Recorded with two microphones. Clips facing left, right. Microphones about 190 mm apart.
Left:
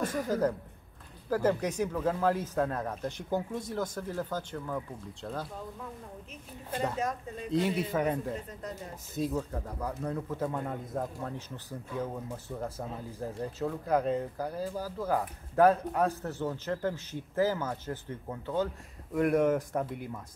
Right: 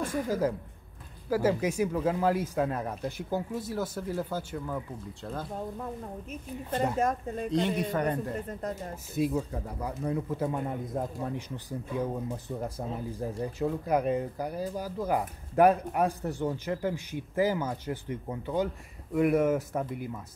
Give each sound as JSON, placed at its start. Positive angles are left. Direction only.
{"t": 0.0, "sound": "a woman's voice", "side_deg": -10}
{"t": 7.0, "sound": "speech", "side_deg": -50}
{"t": 7.5, "sound": "speech", "side_deg": 5}
{"t": 8.4, "sound": "speech", "side_deg": -50}
{"t": 9.1, "sound": "speech", "side_deg": -10}